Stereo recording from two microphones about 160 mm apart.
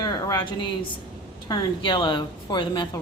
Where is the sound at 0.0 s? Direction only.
25° left (ahead or behind).